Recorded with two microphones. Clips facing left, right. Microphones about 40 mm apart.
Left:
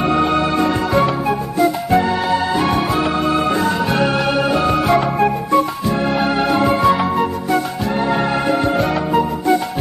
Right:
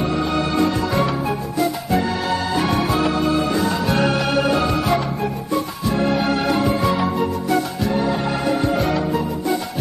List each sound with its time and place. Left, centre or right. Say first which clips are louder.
0.0 s music: left 5 dB; left
0.9 s music: left 4 dB; left
3.3 s music: left 3 dB; left
4.0 s music: left 1 dB; centre
4.6 s music: left 3 dB; left
4.8 s music: left 6 dB; left
6.2 s music: left 3 dB; left
6.6 s music: left 5 dB; left
7.0 s music: left 3 dB; left
8.1 s music: left 4 dB; left
8.7 s music: left 2 dB; left